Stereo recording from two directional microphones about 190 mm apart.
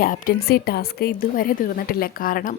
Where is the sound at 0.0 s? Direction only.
50° left (ahead or behind).